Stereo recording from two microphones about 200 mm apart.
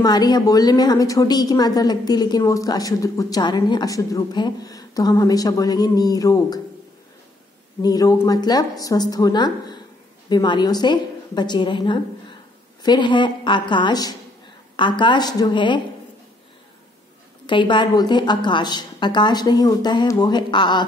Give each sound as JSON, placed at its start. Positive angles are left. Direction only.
{"t": 0.0, "sound": "a woman's voice", "side_deg": 20}
{"t": 7.8, "sound": "a woman's voice", "side_deg": 20}
{"t": 17.5, "sound": "a woman's voice", "side_deg": 25}